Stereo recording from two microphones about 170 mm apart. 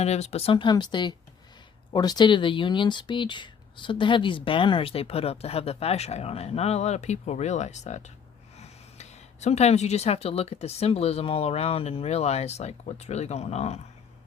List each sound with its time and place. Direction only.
0.0 s speech: 40° left (ahead or behind)